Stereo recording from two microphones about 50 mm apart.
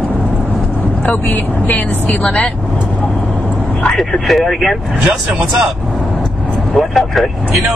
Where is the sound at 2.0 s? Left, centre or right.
Left.